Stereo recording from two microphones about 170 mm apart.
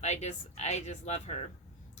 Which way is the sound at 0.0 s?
40° left (ahead or behind).